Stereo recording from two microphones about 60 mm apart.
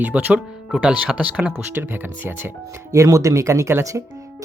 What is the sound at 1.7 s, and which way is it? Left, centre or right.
Speech, right.